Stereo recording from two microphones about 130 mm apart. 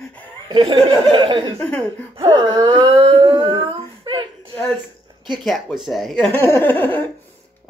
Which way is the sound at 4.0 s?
40° right (ahead or behind).